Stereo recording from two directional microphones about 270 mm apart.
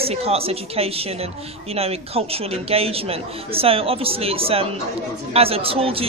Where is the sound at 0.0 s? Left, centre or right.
Right.